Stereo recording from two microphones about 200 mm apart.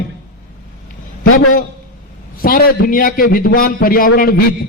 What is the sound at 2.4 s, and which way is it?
A man's voice, 50° left (ahead or behind).